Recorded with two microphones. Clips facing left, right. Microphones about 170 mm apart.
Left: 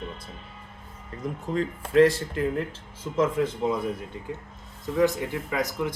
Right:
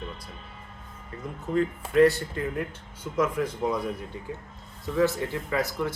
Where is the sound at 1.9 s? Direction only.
30° left (ahead or behind).